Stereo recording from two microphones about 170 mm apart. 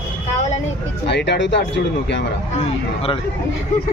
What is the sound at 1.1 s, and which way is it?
Speech, 85° left.